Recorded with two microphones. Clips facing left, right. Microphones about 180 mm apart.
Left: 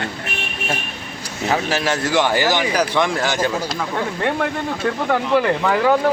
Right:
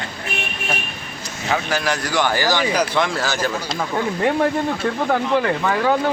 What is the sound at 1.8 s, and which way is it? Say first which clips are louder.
Speech: left 2 dB; 25° left (ahead or behind).